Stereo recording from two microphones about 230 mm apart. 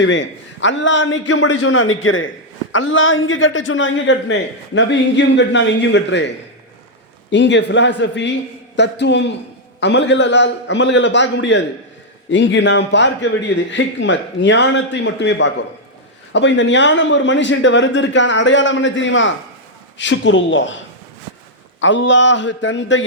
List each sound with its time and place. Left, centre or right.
0.0 s a man's voice: left
21.8 s a man's voice: left